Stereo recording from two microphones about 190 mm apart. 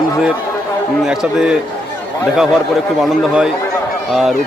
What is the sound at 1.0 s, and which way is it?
Speech, centre (ahead or behind).